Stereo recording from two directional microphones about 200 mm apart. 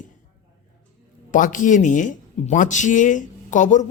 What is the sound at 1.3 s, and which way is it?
Speech, 40° left (ahead or behind).